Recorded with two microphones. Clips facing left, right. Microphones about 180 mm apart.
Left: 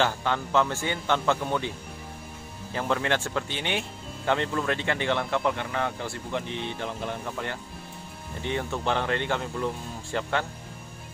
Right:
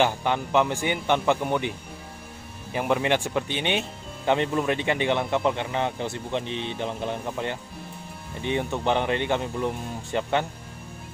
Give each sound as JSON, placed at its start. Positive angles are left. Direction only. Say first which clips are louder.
{"t": 0.0, "sound": "speech", "louder": "right 3 dB", "side_deg": -15}
{"t": 2.7, "sound": "speech", "louder": "right 3 dB", "side_deg": -15}